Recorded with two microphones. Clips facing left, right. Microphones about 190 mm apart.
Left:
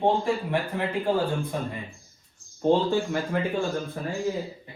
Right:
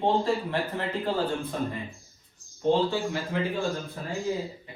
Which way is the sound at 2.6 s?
50° left (ahead or behind).